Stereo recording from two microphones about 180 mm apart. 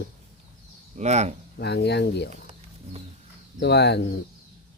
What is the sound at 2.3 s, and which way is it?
Bird, 35° right (ahead or behind).